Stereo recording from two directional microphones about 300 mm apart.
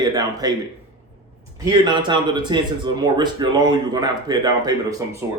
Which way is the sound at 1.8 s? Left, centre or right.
Centre.